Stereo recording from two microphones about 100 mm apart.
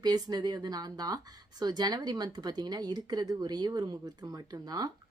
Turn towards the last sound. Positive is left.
turn(degrees=-40)  # may be behind; listen again after turning